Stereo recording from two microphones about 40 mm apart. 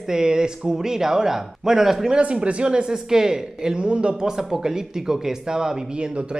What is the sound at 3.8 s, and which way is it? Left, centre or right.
Speech, right.